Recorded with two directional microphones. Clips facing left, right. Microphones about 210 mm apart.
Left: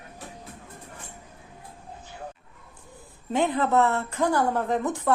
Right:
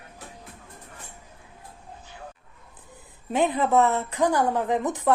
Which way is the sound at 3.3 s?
15° right (ahead or behind).